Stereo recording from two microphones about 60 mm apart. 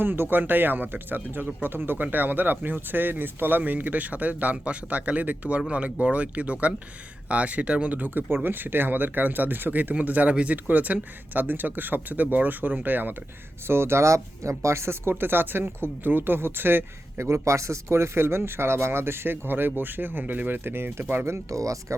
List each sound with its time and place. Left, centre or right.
0.0 s speech: right
13.7 s speech: right
15.2 s speech: right
21.2 s speech: right
21.6 s speech: right